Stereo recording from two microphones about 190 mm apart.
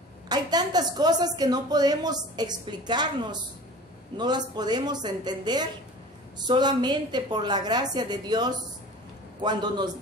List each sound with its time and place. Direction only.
0.3 s a woman's voice: 20° right (ahead or behind)